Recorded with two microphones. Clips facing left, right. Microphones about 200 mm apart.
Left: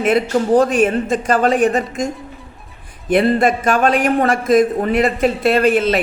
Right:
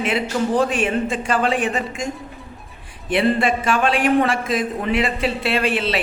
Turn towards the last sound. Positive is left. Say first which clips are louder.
# left 7 dB
turn(degrees=45)  # may be behind; listen again after turning